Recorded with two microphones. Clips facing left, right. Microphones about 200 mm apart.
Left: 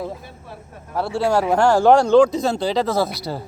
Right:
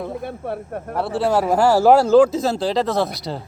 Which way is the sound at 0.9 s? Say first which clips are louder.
Even; centre (ahead or behind).